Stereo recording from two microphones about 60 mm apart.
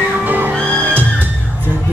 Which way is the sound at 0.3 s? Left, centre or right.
Right.